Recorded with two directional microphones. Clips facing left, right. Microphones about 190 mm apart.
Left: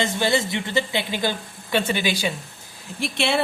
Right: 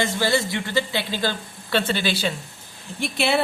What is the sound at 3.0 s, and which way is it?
Speech, centre (ahead or behind).